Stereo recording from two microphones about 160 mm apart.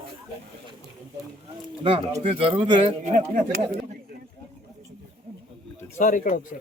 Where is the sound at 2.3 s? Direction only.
35° right (ahead or behind).